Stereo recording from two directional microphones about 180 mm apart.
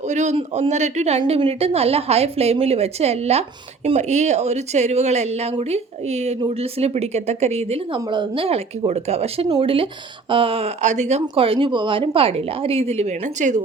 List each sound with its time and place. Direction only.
0.1 s speech: 40° right (ahead or behind)